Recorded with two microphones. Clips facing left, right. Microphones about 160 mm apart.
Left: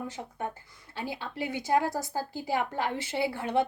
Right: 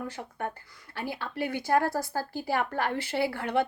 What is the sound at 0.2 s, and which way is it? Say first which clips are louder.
A woman's voice: right 1 dB; 15° left (ahead or behind).